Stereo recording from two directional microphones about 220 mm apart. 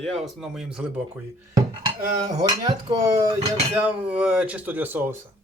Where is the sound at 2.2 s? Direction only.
15° right (ahead or behind).